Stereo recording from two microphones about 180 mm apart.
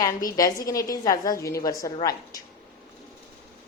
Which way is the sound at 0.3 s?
20° left (ahead or behind).